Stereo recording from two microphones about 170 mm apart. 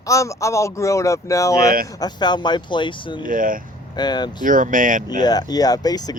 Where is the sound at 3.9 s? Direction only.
25° left (ahead or behind).